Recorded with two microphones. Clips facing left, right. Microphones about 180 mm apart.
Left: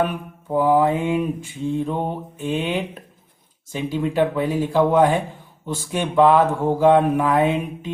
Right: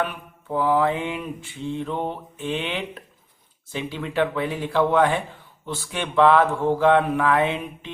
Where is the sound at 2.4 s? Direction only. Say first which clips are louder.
Left 4 dB; 45° left (ahead or behind).